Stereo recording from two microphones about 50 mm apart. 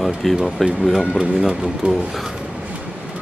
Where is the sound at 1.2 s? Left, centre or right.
Centre.